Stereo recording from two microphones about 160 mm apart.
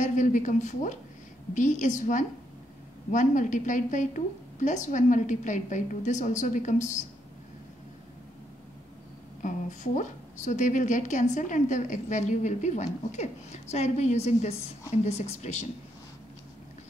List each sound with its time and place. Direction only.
0.0 s a woman's voice: 50° left (ahead or behind)
9.4 s a woman's voice: 50° left (ahead or behind)